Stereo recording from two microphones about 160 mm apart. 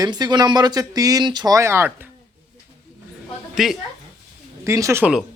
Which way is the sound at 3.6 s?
Centre (ahead or behind).